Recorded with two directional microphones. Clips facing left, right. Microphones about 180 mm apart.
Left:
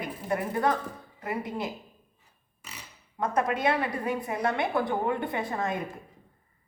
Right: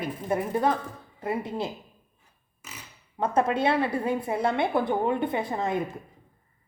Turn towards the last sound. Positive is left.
turn(degrees=-20)  # may be behind; listen again after turning